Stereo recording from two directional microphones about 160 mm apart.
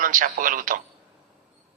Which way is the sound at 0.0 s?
55° right (ahead or behind).